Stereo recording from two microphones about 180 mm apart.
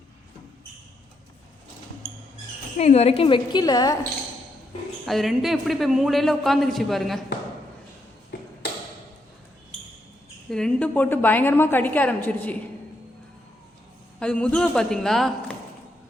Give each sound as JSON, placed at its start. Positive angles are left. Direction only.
{"t": 2.7, "sound": "a woman's voice", "side_deg": 35}
{"t": 5.0, "sound": "speech", "side_deg": 0}
{"t": 8.3, "sound": "a sound", "side_deg": 65}
{"t": 10.5, "sound": "a woman's voice", "side_deg": 5}
{"t": 14.2, "sound": "speech", "side_deg": 5}